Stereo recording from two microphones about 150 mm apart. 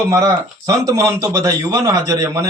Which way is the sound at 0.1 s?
20° right (ahead or behind).